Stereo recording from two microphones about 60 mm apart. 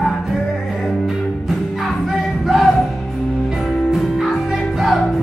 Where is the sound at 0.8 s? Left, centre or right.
Centre.